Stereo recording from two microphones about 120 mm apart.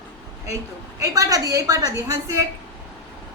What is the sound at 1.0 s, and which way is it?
Speech, 30° right (ahead or behind).